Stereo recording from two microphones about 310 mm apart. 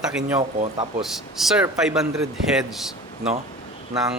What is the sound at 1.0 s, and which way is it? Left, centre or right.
A man's voice, centre.